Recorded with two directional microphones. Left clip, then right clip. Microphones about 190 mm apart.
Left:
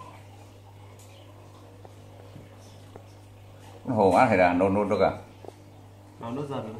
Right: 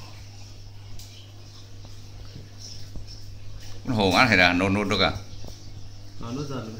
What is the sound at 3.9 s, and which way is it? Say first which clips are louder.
Speech: even; 55° right (ahead or behind).